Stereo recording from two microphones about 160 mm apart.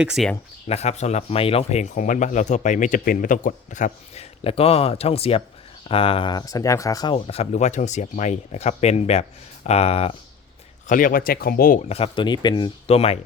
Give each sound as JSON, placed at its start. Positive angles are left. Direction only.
{"t": 0.0, "sound": "speech", "side_deg": -5}
{"t": 0.7, "sound": "speech", "side_deg": 40}
{"t": 7.3, "sound": "speech", "side_deg": 40}
{"t": 10.8, "sound": "speech", "side_deg": 55}
{"t": 11.9, "sound": "speech", "side_deg": 35}